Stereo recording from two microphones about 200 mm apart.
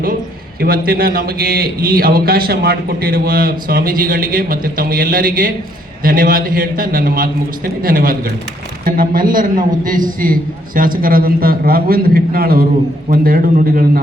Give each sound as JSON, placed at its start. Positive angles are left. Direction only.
{"t": 0.6, "sound": "a man's voice", "side_deg": -50}